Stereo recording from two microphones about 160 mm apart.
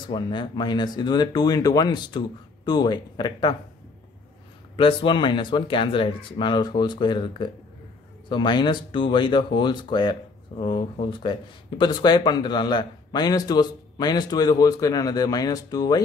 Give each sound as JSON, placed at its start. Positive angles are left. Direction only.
{"t": 0.1, "sound": "a man's voice", "side_deg": 30}
{"t": 4.7, "sound": "a man's voice", "side_deg": 30}